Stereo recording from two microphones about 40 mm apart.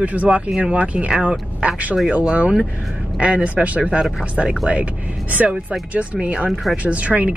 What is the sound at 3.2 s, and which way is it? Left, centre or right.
Speech, right.